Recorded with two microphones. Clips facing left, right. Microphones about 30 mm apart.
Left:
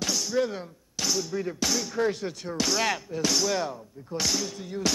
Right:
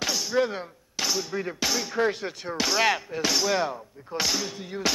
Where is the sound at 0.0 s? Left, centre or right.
Centre.